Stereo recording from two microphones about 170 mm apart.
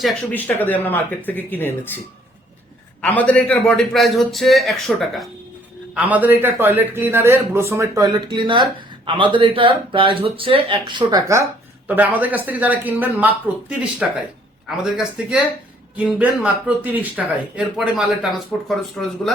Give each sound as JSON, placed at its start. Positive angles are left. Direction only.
{"t": 0.0, "sound": "speech", "side_deg": 10}
{"t": 3.0, "sound": "a man's voice", "side_deg": 5}
{"t": 11.9, "sound": "a man's voice", "side_deg": -10}